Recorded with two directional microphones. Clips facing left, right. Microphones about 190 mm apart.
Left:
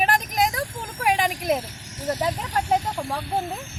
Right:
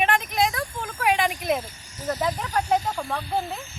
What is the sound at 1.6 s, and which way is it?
Vehicle, 75° left (ahead or behind).